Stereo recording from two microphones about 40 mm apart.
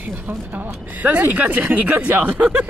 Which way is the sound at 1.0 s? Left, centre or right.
Right.